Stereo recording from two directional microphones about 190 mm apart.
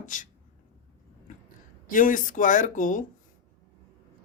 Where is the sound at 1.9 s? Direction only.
45° left (ahead or behind).